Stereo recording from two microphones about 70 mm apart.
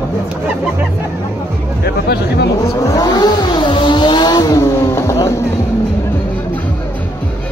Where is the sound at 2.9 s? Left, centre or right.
Left.